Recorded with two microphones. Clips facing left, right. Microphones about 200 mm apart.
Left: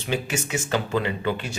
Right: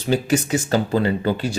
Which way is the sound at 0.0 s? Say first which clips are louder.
Right 8 dB; 35° right (ahead or behind).